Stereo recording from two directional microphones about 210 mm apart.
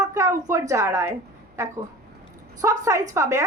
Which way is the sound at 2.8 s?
15° right (ahead or behind).